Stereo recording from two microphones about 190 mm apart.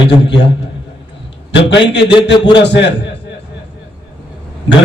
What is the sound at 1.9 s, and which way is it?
Speech, 65° left (ahead or behind).